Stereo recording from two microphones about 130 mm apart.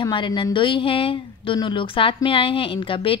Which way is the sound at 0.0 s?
40° left (ahead or behind).